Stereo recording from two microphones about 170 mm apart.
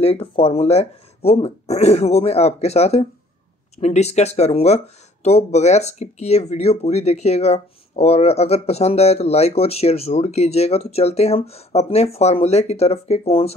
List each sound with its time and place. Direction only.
0.0 s speech: 35° left (ahead or behind)